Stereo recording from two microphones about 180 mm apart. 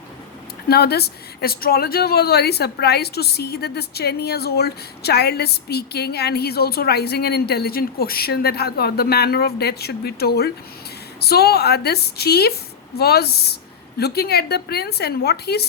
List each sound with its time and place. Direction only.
0.7 s speech: 60° left (ahead or behind)